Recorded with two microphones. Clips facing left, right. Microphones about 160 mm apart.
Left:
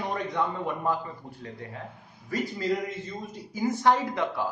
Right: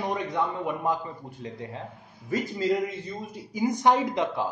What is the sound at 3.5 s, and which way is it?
Speech, 15° right (ahead or behind).